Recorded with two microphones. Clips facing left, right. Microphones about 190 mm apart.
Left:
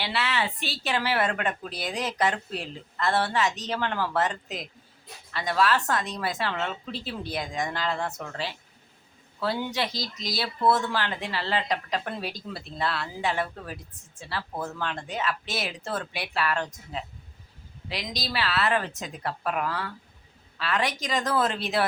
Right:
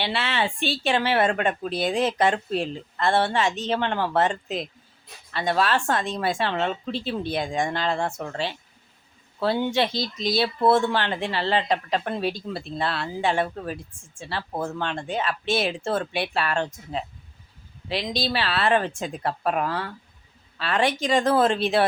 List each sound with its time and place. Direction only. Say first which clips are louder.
0.0 s speech: right 3 dB; 25° right (ahead or behind)
9.4 s speech: right 6 dB; 25° right (ahead or behind)